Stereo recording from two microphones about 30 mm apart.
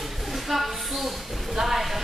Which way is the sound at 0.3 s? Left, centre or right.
Centre.